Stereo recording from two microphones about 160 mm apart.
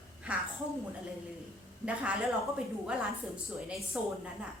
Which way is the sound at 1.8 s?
5° right (ahead or behind).